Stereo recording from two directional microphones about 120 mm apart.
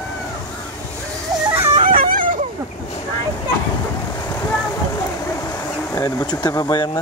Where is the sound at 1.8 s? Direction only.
50° right (ahead or behind).